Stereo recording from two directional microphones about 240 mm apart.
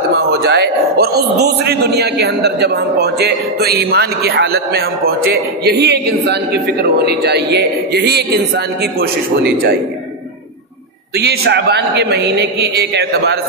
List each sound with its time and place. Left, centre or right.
0.3 s a man's voice: right
11.1 s a man's voice: right